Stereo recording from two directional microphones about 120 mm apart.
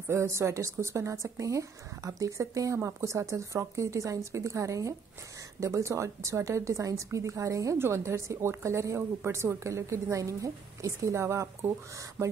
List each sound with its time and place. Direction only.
0.1 s speech: 25° right (ahead or behind)